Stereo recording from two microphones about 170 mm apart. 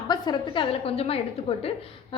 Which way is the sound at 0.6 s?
35° left (ahead or behind).